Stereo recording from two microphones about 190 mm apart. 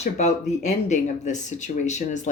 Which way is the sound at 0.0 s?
35° left (ahead or behind).